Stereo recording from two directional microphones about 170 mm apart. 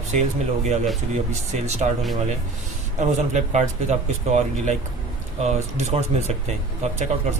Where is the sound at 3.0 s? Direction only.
45° right (ahead or behind).